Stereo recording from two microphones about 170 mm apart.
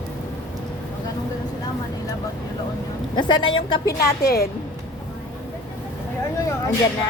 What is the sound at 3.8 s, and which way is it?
Speech, 65° left (ahead or behind).